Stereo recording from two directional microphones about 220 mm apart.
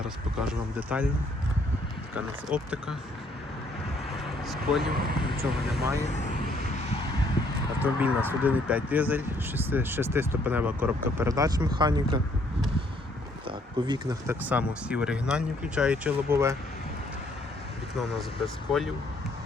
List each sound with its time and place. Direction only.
0.4 s speech: 5° right (ahead or behind)
2.1 s speech: 5° right (ahead or behind)
4.4 s speech: centre (ahead or behind)
4.9 s speech: 45° right (ahead or behind)
6.0 s speech: 30° left (ahead or behind)
7.8 s speech: 10° right (ahead or behind)
13.5 s speech: 20° right (ahead or behind)
18.4 s speech: centre (ahead or behind)